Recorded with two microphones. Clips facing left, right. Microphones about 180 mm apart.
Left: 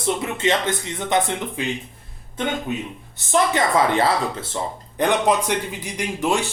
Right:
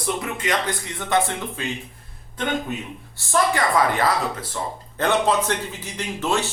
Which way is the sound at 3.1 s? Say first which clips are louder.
Left 2 dB; 20° left (ahead or behind).